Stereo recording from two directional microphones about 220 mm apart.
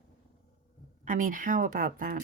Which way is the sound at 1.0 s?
35° right (ahead or behind).